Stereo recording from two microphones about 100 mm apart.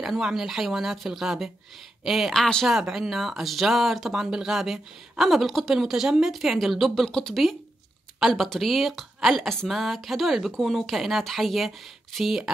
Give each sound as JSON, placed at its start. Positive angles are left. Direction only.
{"t": 0.0, "sound": "speech", "side_deg": -5}